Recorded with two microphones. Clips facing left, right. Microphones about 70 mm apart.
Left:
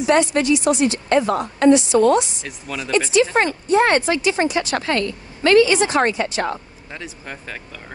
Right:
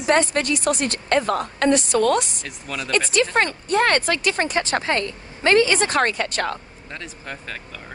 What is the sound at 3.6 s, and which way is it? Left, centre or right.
Speech, right.